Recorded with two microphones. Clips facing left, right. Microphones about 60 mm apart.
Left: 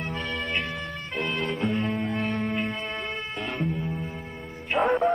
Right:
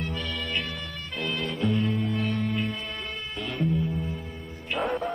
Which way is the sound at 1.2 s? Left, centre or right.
Left.